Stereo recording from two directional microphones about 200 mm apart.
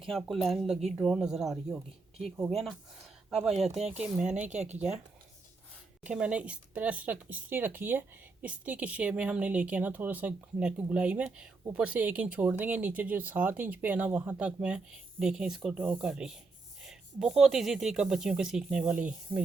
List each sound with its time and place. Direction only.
0.0 s speech: centre (ahead or behind)
3.6 s speech: 35° right (ahead or behind)
3.9 s speech: 5° right (ahead or behind)
4.4 s speech: 35° right (ahead or behind)
6.0 s speech: 5° right (ahead or behind)